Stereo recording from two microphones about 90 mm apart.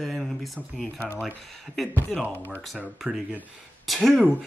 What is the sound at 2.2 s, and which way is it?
Speech, 25° right (ahead or behind).